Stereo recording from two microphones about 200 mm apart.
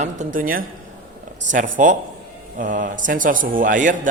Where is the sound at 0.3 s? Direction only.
45° right (ahead or behind).